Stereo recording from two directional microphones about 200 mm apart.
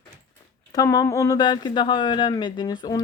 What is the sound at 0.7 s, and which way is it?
Speech, 15° left (ahead or behind).